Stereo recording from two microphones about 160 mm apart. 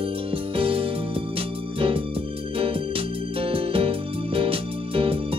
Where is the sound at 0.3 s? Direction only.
35° right (ahead or behind).